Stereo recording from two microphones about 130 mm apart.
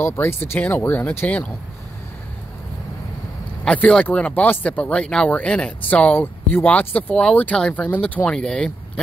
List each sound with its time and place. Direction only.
0.0 s speech: 15° left (ahead or behind)
3.6 s speech: 10° left (ahead or behind)